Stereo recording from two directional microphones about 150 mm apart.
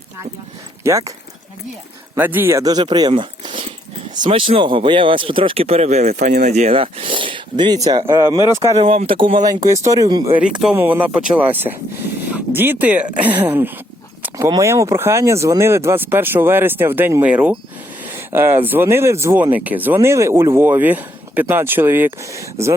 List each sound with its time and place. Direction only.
0.9 s speech: 20° right (ahead or behind)
2.1 s speech: 10° right (ahead or behind); by 6.5 s 65° right (ahead or behind)
6.5 s speech: 45° right (ahead or behind); by 8.9 s 25° right (ahead or behind)
8.9 s speech: 40° right (ahead or behind)
10.6 s speech: 10° right (ahead or behind)